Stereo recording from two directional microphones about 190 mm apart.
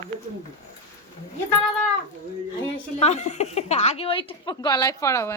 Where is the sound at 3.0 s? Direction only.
35° left (ahead or behind); by 5.3 s 15° left (ahead or behind).